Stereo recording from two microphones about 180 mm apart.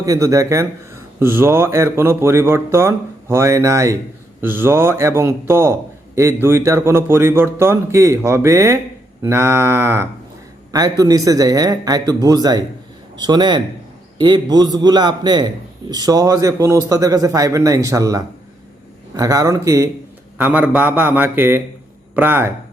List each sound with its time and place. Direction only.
0.0 s a man's voice: 15° right (ahead or behind)